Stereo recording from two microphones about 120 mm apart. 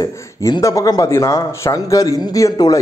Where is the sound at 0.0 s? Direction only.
30° left (ahead or behind).